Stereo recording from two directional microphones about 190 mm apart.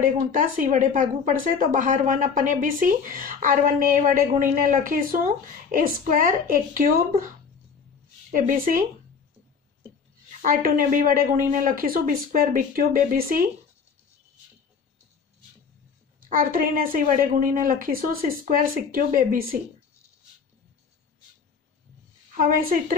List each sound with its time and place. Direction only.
0.0 s speech: 45° right (ahead or behind)
8.4 s speech: 45° right (ahead or behind)
10.4 s speech: 45° right (ahead or behind)
16.2 s speech: 50° right (ahead or behind)
22.4 s speech: 45° right (ahead or behind)